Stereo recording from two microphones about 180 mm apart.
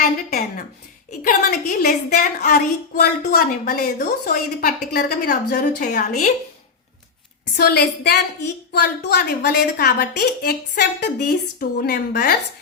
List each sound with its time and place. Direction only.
0.0 s a woman's voice: 45° left (ahead or behind)
2.0 s a woman's voice: 45° left (ahead or behind)
7.5 s a woman's voice: 60° left (ahead or behind)